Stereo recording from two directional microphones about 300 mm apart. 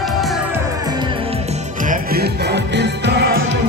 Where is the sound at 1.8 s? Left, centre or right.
Right.